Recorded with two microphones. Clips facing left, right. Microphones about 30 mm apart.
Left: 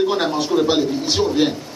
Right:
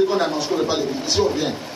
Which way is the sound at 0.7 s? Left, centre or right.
Left.